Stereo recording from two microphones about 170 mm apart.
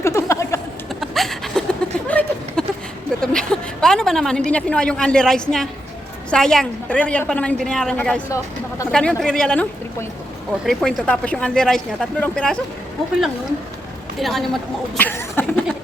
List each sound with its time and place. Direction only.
0.0 s a sound: 20° left (ahead or behind)
1.1 s a sound: centre (ahead or behind)
3.2 s a woman's voice: 5° left (ahead or behind)
10.7 s speech: 5° left (ahead or behind)
14.2 s speech: centre (ahead or behind)
14.9 s cough: 10° left (ahead or behind)